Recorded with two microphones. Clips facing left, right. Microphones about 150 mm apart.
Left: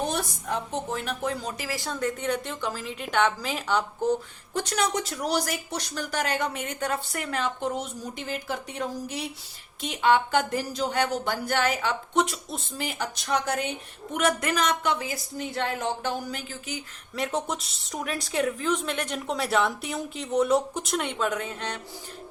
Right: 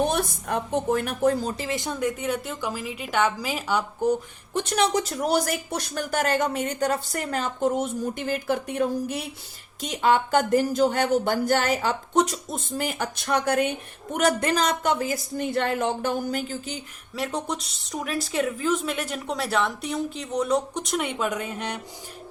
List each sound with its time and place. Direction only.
0.1 s speech: 60° right (ahead or behind); by 4.1 s 10° right (ahead or behind)
4.5 s speech: 20° right (ahead or behind)
4.9 s speech: 35° right (ahead or behind)
5.2 s speech: 50° right (ahead or behind)
9.8 s speech: 40° right (ahead or behind); by 14.2 s 55° right (ahead or behind)
14.2 s speech: 35° right (ahead or behind)
17.2 s a woman's voice: centre (ahead or behind)